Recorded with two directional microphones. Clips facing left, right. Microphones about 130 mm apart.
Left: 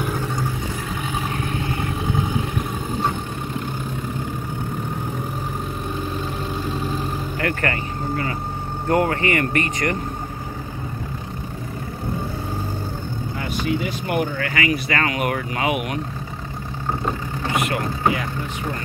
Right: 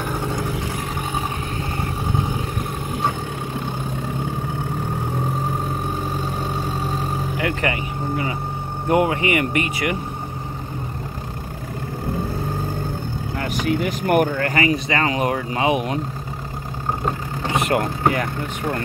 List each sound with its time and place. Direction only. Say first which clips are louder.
7.3 s speech: even; 15° right (ahead or behind)
13.7 s speech: right 5 dB; 55° right (ahead or behind)
14.6 s speech: right 1 dB; 20° right (ahead or behind)
17.6 s speech: right 4 dB; 45° right (ahead or behind)